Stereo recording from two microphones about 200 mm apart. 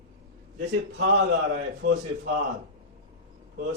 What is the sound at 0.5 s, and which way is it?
A man's voice, 55° right (ahead or behind).